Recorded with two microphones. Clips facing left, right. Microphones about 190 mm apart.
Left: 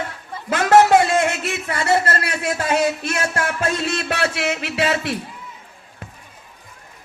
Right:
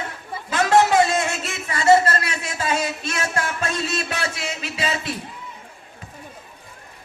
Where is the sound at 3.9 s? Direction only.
65° left (ahead or behind).